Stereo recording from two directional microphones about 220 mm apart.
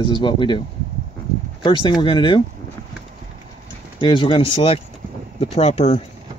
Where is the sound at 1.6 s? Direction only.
20° left (ahead or behind).